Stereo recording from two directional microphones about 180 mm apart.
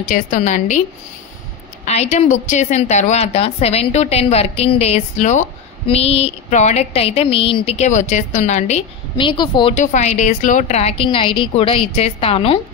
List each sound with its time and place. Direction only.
0.1 s a woman's voice: 45° left (ahead or behind)
1.9 s a woman's voice: 40° left (ahead or behind)
9.8 s a woman's voice: 40° left (ahead or behind)